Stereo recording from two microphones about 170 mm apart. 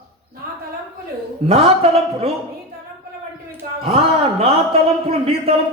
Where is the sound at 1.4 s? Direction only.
35° right (ahead or behind).